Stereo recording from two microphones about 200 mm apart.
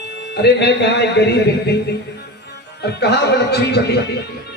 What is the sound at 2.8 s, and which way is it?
Speech, 55° left (ahead or behind).